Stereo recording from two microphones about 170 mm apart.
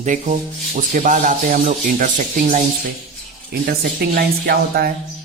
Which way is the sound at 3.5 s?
65° right (ahead or behind).